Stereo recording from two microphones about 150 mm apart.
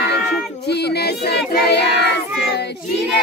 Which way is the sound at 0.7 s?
90° left.